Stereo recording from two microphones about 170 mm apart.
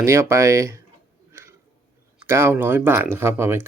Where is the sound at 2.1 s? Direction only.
15° right (ahead or behind).